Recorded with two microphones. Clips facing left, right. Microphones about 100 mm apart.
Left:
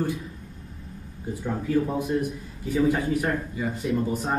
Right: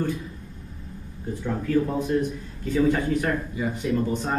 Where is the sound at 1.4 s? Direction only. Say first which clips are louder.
Right 1 dB; 15° left (ahead or behind).